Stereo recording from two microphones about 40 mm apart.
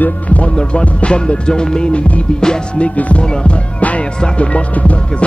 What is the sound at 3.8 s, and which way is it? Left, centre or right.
Music, left.